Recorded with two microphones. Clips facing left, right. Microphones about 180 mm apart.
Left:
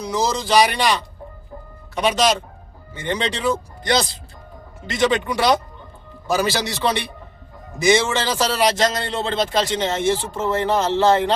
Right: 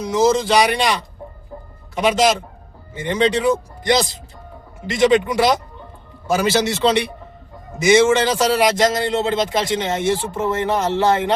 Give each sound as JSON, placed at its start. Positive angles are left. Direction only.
{"t": 0.1, "sound": "a man's voice", "side_deg": -20}
{"t": 2.0, "sound": "a man's voice", "side_deg": -25}